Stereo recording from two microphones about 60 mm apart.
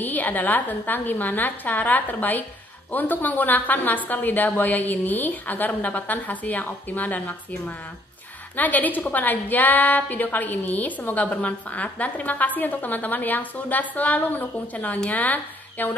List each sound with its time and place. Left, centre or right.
0.0 s a woman's voice: left